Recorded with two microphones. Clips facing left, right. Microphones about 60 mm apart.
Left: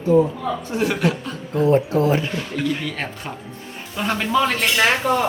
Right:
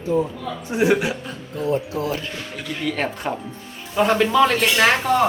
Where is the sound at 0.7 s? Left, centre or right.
Centre.